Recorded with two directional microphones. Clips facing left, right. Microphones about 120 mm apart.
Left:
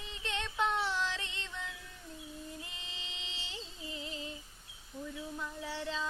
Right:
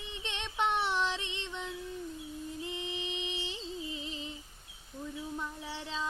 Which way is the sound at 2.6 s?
20° right (ahead or behind).